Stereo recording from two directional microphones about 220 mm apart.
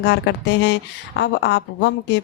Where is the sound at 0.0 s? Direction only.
50° left (ahead or behind).